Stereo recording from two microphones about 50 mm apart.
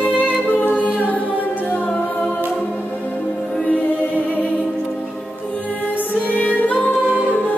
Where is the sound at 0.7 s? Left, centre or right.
Left.